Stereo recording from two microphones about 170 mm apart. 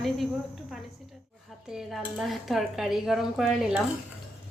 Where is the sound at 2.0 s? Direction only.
5° right (ahead or behind).